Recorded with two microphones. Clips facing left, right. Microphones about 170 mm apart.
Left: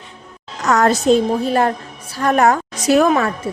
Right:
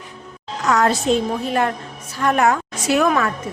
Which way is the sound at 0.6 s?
45° left (ahead or behind).